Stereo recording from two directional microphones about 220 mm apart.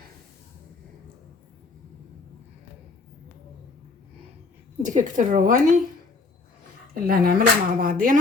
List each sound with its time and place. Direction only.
4.8 s speech: 35° right (ahead or behind)
6.9 s speech: 40° right (ahead or behind)